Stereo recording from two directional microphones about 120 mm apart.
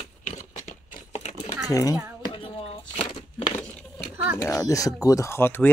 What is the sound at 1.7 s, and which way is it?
Speech, 30° left (ahead or behind).